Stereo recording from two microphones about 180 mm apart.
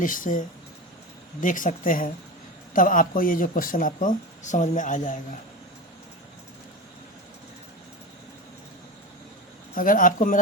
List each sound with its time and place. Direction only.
0.0 s speech: 50° left (ahead or behind)
9.7 s speech: 50° left (ahead or behind)